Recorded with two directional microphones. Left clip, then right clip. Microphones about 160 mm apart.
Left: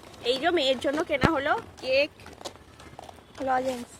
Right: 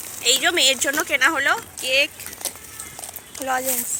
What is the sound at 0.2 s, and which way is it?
Speech, 15° left (ahead or behind).